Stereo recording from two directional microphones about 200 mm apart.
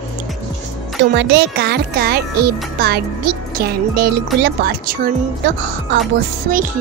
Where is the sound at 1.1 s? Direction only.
55° right (ahead or behind).